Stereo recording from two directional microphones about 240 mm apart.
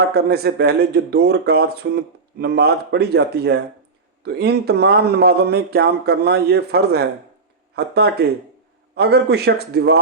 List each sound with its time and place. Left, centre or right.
0.1 s speech: right